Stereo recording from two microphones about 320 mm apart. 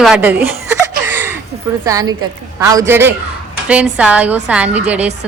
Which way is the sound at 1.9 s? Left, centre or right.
Centre.